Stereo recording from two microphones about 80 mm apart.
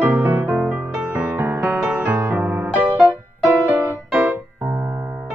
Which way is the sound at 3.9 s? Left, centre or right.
Right.